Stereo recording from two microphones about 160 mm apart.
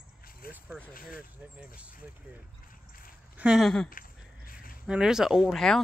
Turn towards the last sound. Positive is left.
turn(degrees=0)  # may be behind; listen again after turning